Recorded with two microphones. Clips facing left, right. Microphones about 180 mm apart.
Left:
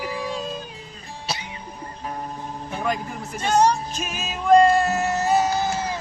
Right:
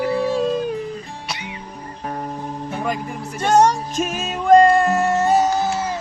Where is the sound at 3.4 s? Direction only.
50° right (ahead or behind).